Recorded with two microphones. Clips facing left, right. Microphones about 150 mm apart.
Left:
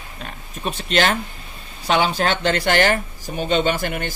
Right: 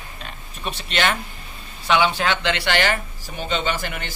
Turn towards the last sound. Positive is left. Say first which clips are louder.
# left 4 dB
turn(degrees=50)  # may be behind; listen again after turning